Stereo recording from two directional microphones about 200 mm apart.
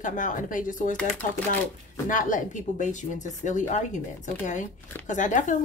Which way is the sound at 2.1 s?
40° left (ahead or behind).